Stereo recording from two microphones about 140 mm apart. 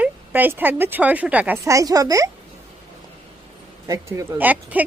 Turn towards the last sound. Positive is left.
turn(degrees=-10)  # may be behind; listen again after turning